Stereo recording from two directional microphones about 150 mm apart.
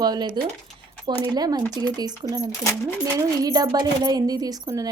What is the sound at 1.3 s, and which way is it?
Speech, 25° right (ahead or behind).